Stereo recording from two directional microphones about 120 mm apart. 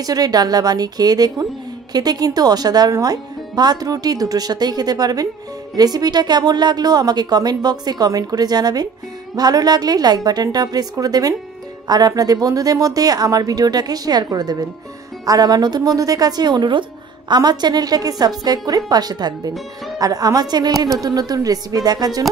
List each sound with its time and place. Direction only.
0.0 s speech: 30° right (ahead or behind)